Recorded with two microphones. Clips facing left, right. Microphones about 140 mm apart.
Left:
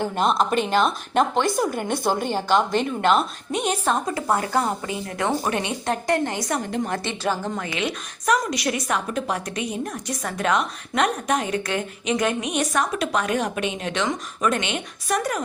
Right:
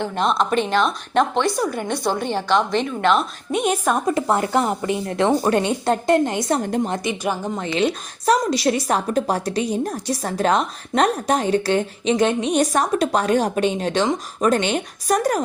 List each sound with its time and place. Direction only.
0.0 s a woman's voice: 5° left (ahead or behind)
4.0 s speech: 25° right (ahead or behind)
5.5 s a woman's voice: 35° right (ahead or behind); by 7.7 s 20° right (ahead or behind)
7.8 s a woman's voice: 30° right (ahead or behind)